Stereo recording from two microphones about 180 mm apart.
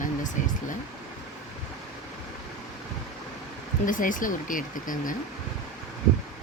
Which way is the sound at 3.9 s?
50° left (ahead or behind).